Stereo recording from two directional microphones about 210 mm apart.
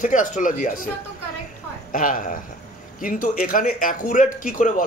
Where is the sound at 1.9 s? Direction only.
40° left (ahead or behind).